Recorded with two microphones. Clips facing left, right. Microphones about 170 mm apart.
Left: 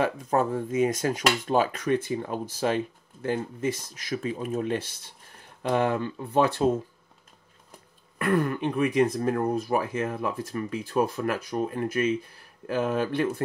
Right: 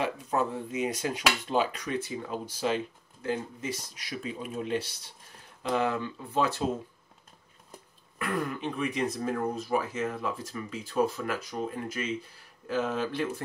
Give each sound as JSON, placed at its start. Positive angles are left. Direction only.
{"t": 0.0, "sound": "speech", "side_deg": 45}
{"t": 8.2, "sound": "speech", "side_deg": 55}